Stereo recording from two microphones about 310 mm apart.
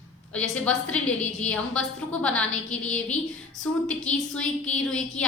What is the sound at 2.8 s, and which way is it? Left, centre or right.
A woman's voice, centre.